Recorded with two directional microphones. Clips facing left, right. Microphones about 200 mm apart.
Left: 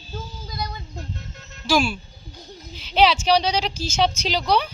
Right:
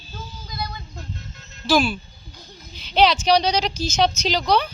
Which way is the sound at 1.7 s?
10° left (ahead or behind).